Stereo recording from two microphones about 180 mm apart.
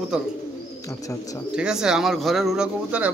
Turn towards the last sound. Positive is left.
turn(degrees=-5)  # may be behind; listen again after turning